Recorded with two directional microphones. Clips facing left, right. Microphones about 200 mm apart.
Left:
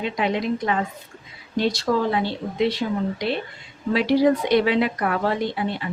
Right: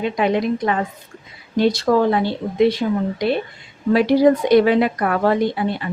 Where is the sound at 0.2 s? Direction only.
50° right (ahead or behind).